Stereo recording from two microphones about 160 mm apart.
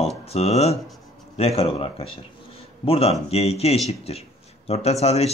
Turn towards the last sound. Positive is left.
turn(degrees=40)  # may be behind; listen again after turning